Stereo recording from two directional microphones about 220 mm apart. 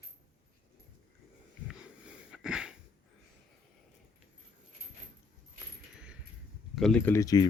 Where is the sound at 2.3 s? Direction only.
5° right (ahead or behind).